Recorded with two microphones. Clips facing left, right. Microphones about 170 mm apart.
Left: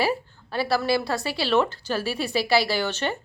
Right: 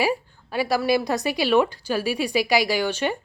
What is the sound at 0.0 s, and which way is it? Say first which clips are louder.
A woman's voice: right 1 dB; 10° right (ahead or behind).